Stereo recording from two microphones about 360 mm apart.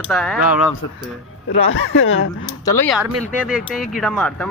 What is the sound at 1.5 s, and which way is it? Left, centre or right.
Speech, left.